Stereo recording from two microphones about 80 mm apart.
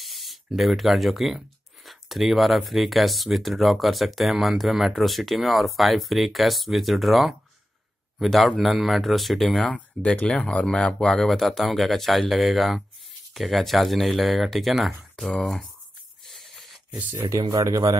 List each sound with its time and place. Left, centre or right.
0.0 s speech: centre
9.8 s speech: centre
16.3 s a sound: centre
17.1 s speech: right